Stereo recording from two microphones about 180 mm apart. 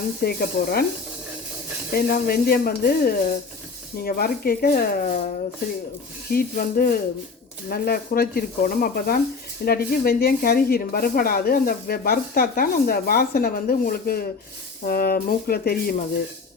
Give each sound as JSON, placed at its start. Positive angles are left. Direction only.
{"t": 0.2, "sound": "speech", "side_deg": 60}
{"t": 1.9, "sound": "speech", "side_deg": 60}
{"t": 6.3, "sound": "speech", "side_deg": 55}